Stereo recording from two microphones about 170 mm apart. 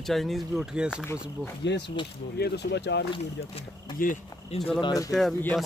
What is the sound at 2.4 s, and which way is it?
Speech, 75° left (ahead or behind).